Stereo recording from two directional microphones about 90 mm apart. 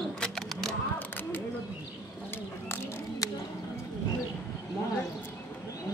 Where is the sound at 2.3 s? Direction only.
25° left (ahead or behind).